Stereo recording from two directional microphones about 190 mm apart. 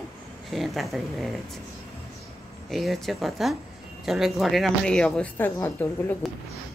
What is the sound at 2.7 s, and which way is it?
Speech, centre (ahead or behind).